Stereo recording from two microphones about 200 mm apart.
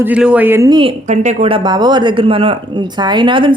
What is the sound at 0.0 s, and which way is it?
Speech, 5° right (ahead or behind).